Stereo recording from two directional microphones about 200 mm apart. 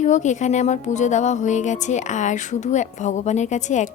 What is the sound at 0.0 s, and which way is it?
Speech, 35° left (ahead or behind).